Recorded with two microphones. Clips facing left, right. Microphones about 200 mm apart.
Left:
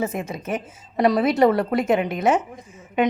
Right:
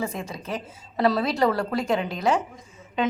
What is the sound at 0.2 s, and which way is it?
A woman's voice, 20° left (ahead or behind).